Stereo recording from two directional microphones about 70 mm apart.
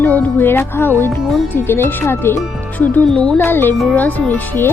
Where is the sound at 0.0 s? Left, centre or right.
Left.